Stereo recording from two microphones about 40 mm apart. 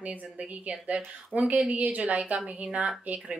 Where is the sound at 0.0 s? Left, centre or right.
Right.